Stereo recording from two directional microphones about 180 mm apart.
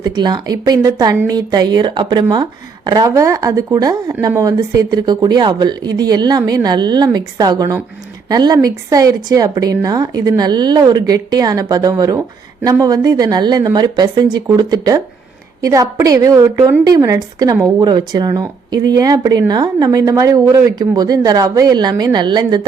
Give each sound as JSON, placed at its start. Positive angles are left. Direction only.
{"t": 0.0, "sound": "speech", "side_deg": -25}